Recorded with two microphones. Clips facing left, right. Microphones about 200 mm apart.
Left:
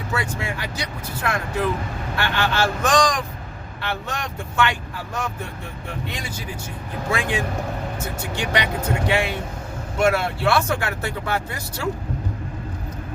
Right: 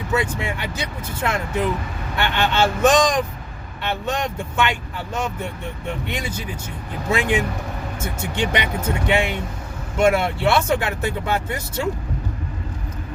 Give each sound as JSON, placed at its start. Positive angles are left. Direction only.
{"t": 0.1, "sound": "speech", "side_deg": -20}
{"t": 2.1, "sound": "speech", "side_deg": -20}